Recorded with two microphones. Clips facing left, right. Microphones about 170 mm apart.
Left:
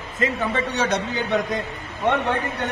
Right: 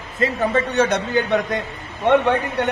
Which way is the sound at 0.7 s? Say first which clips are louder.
Right 5 dB; 55° right (ahead or behind).